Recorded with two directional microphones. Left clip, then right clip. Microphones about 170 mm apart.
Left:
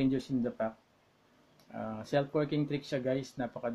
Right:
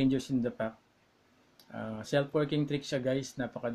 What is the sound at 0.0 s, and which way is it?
Speech, 20° right (ahead or behind).